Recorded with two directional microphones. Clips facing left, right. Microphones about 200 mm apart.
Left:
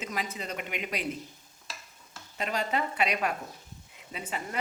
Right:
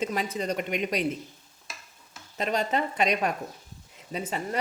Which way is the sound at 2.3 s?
35° right (ahead or behind).